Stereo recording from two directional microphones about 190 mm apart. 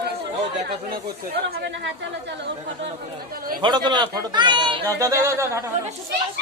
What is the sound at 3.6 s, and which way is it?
Speech, 25° right (ahead or behind).